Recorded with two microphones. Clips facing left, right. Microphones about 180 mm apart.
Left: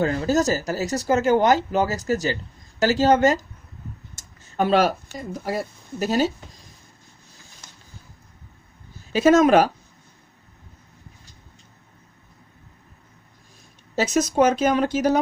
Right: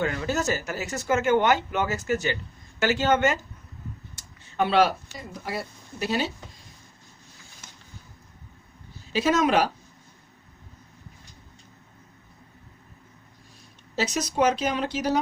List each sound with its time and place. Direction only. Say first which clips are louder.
0.0 s speech: left 6 dB; 35° left (ahead or behind)
9.1 s speech: left 7 dB; 45° left (ahead or behind)
13.9 s speech: left 6 dB; 50° left (ahead or behind)